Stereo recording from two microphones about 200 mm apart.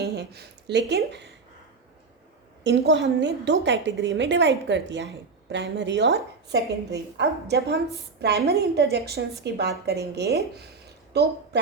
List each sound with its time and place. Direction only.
0.0 s speech: 55° right (ahead or behind)
2.6 s a woman's voice: 60° right (ahead or behind)